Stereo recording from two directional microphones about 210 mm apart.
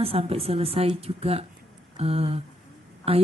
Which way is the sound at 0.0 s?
30° right (ahead or behind).